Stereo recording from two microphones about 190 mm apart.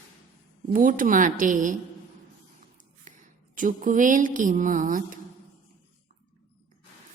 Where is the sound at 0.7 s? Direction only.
45° right (ahead or behind).